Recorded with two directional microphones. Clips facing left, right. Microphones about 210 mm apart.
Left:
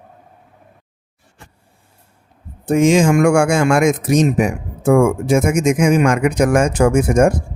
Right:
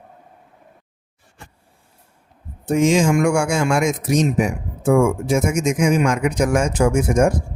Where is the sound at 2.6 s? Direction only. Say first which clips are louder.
Left 3 dB; 55° left (ahead or behind).